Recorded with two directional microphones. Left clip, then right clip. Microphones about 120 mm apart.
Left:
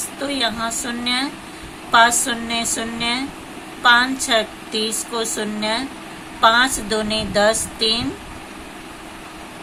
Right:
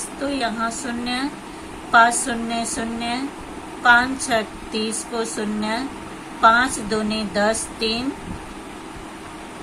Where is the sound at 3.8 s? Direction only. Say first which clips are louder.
Left 1 dB; 45° left (ahead or behind).